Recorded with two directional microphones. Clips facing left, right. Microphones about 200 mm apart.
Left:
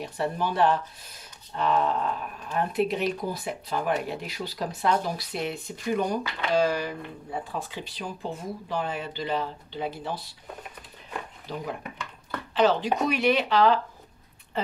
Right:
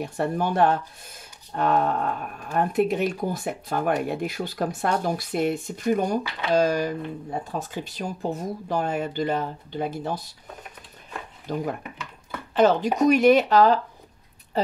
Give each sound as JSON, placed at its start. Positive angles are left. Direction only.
{"t": 0.0, "sound": "speech", "side_deg": -50}
{"t": 11.5, "sound": "speech", "side_deg": -50}